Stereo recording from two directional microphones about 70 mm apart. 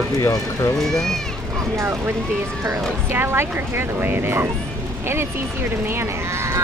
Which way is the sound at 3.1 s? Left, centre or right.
Right.